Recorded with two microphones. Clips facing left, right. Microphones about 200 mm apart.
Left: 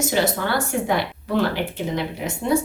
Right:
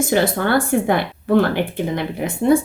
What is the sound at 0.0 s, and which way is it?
Speech, 55° right (ahead or behind).